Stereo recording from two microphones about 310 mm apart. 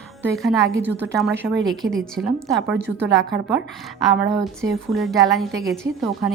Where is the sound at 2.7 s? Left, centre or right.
Right.